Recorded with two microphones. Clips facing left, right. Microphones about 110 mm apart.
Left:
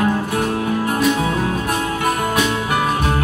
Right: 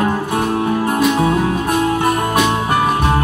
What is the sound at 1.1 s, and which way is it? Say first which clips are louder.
Music: right 4 dB; 30° right (ahead or behind).